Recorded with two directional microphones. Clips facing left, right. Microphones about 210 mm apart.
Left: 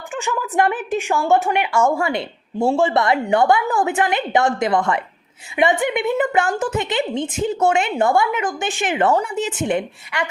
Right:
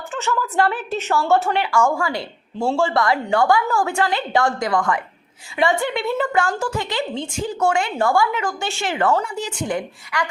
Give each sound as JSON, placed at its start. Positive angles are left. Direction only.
{"t": 0.1, "sound": "a woman's voice", "side_deg": 15}